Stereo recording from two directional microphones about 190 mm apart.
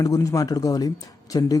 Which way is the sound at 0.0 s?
15° left (ahead or behind).